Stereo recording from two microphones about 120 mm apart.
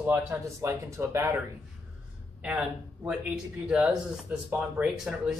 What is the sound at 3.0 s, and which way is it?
Speech, 10° right (ahead or behind).